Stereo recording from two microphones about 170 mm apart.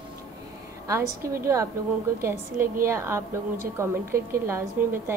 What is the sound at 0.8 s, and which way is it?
A woman's voice, 15° right (ahead or behind).